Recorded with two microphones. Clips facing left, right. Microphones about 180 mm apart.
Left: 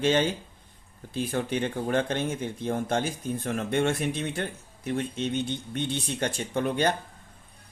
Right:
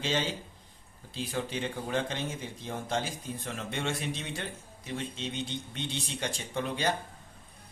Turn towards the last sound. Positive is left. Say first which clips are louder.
# left 6 dB
turn(degrees=55)  # may be behind; listen again after turning